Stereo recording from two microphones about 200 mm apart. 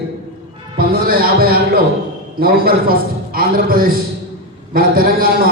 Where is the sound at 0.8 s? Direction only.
45° right (ahead or behind).